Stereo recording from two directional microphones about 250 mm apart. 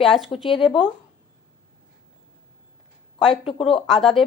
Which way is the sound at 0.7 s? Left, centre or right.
Centre.